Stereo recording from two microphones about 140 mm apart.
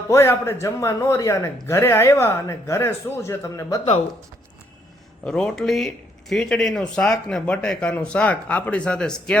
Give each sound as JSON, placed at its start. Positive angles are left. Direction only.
{"t": 0.1, "sound": "a man's voice", "side_deg": 20}
{"t": 5.2, "sound": "speech", "side_deg": 5}